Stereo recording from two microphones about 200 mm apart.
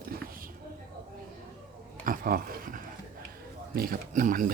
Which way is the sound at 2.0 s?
45° right (ahead or behind).